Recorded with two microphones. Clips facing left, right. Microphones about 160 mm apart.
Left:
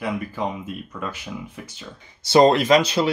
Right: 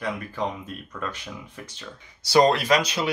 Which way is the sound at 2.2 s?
25° left (ahead or behind).